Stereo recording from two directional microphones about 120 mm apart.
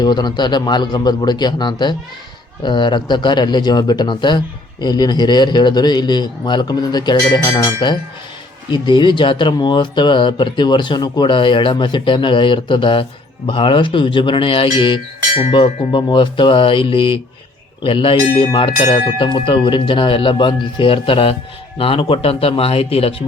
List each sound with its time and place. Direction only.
0.0 s speech: 35° left (ahead or behind); by 23.1 s 55° left (ahead or behind)